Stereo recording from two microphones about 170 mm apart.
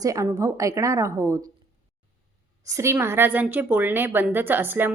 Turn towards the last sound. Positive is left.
turn(degrees=-10)  # may be behind; listen again after turning